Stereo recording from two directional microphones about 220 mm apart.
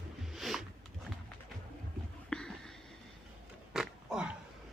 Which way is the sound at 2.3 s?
5° left (ahead or behind).